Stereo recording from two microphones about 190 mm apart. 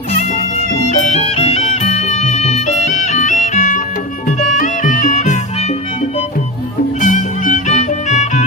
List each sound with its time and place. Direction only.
0.2 s music: 35° left (ahead or behind)